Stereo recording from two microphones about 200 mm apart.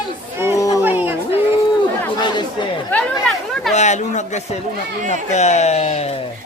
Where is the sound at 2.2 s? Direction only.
25° left (ahead or behind).